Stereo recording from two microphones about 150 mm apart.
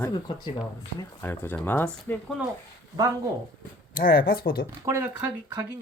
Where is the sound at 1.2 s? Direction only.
15° left (ahead or behind).